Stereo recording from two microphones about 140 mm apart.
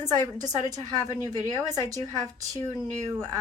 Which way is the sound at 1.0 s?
20° left (ahead or behind).